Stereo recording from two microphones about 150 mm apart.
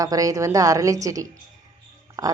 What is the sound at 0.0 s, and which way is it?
Speech, 25° right (ahead or behind).